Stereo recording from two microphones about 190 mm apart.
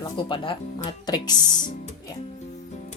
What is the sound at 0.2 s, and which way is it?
Speech, 25° left (ahead or behind).